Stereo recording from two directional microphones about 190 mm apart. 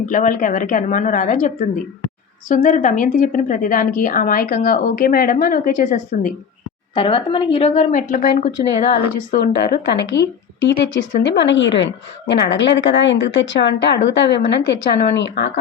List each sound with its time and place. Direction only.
0.0 s a woman's voice: 45° left (ahead or behind)
6.9 s a woman's voice: 25° left (ahead or behind)
9.5 s a woman's voice: 60° left (ahead or behind)